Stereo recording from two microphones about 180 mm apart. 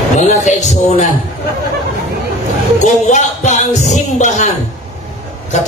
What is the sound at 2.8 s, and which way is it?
Speech, 40° left (ahead or behind).